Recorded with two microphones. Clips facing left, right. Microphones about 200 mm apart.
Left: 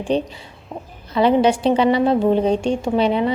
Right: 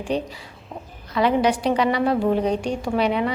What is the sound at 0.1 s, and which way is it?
A woman's voice, 25° left (ahead or behind).